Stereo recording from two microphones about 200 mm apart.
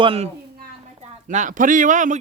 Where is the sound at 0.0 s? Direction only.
30° right (ahead or behind).